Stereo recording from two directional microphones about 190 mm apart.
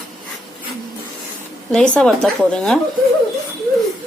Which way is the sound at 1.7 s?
5° left (ahead or behind).